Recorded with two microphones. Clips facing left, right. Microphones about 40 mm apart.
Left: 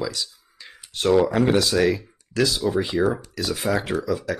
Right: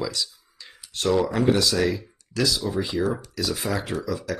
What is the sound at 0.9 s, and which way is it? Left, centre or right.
Speech, left.